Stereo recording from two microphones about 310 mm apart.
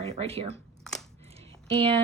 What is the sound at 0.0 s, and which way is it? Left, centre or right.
Speech, centre.